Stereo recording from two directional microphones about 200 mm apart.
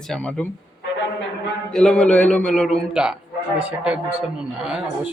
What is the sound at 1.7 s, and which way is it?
Speech, 5° left (ahead or behind).